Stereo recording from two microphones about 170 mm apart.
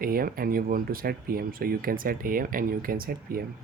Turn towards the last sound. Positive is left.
turn(degrees=-60)  # may be behind; listen again after turning